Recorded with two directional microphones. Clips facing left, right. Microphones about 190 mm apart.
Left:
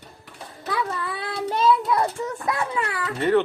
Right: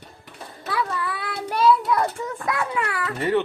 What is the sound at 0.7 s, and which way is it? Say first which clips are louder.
Child singing: right 1 dB; 25° left (ahead or behind).